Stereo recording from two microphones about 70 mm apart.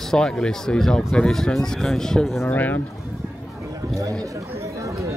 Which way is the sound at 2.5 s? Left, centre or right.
Left.